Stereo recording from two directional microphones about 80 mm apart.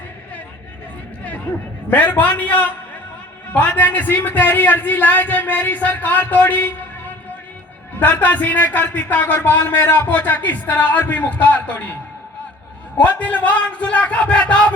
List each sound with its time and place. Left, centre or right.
1.2 s a sound: centre
3.5 s a man's voice: centre
10.1 s a man's voice: left
13.0 s a man's voice: centre